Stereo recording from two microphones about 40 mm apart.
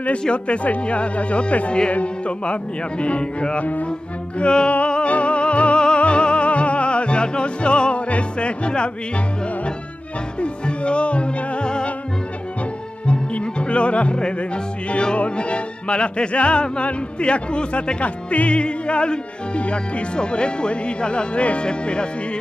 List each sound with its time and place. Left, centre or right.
0.2 s music: left
1.9 s speech: left
4.4 s music: left
10.4 s music: left
13.0 s music: left